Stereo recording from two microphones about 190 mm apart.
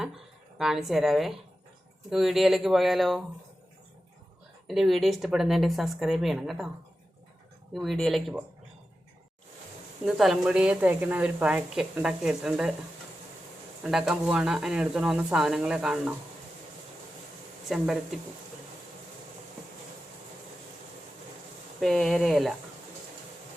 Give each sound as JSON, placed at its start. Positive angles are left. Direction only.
{"t": 0.6, "sound": "a woman's voice", "side_deg": 0}
{"t": 4.7, "sound": "a woman's voice", "side_deg": 0}
{"t": 7.7, "sound": "a woman's voice", "side_deg": 0}
{"t": 10.1, "sound": "a woman's voice", "side_deg": 0}
{"t": 13.8, "sound": "a woman's voice", "side_deg": -5}
{"t": 17.7, "sound": "a woman's voice", "side_deg": 0}
{"t": 21.8, "sound": "a woman's voice", "side_deg": 0}